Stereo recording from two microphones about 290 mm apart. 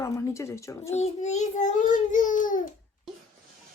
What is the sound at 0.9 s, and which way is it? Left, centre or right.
A child's voice, left.